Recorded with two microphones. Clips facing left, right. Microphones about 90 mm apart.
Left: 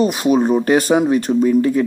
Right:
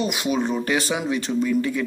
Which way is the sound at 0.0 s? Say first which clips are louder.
Left 8 dB; 40° left (ahead or behind).